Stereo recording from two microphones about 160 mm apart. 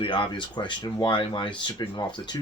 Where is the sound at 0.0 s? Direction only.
30° left (ahead or behind).